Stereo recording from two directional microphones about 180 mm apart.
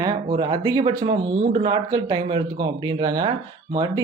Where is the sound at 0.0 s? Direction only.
25° right (ahead or behind).